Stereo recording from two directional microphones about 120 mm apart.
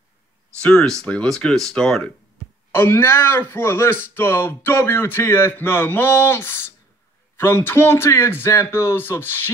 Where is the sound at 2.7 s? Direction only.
20° left (ahead or behind).